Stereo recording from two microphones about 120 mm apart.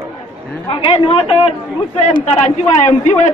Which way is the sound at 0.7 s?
50° left (ahead or behind).